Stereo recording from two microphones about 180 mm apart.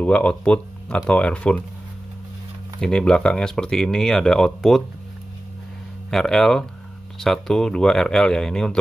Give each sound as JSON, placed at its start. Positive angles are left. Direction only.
{"t": 0.0, "sound": "speech", "side_deg": 5}
{"t": 2.8, "sound": "speech", "side_deg": 5}
{"t": 6.0, "sound": "speech", "side_deg": 0}